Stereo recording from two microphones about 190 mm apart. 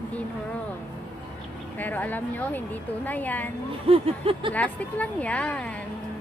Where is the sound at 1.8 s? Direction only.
10° left (ahead or behind).